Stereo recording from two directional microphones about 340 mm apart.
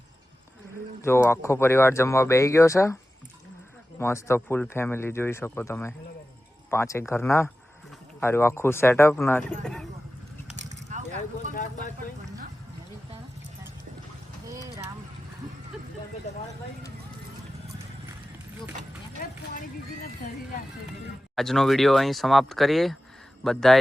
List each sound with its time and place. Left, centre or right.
1.0 s speech: centre
10.8 s vehicle: right
11.5 s vehicle: left
21.3 s a man's voice: centre